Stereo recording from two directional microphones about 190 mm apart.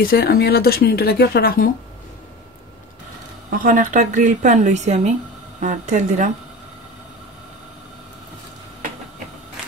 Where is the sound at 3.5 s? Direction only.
45° right (ahead or behind).